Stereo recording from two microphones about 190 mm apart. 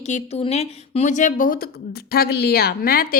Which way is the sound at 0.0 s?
35° left (ahead or behind).